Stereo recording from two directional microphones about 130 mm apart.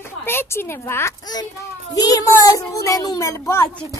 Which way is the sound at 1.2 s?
30° left (ahead or behind).